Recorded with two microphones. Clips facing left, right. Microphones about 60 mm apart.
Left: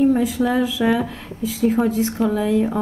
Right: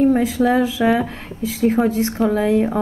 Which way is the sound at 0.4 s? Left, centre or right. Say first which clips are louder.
Right 3 dB; right.